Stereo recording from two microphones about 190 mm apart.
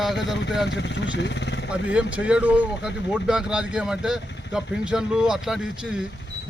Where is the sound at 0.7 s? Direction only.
70° left (ahead or behind).